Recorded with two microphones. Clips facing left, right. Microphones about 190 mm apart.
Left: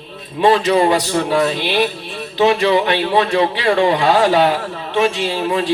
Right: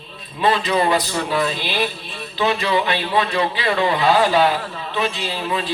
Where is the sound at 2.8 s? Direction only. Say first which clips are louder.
Left 5 dB; 70° left (ahead or behind).